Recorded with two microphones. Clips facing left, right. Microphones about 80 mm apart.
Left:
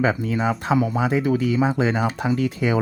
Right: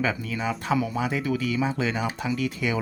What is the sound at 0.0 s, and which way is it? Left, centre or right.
Speech, left.